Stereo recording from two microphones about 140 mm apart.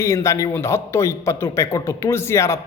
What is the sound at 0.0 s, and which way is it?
Speech, 20° left (ahead or behind).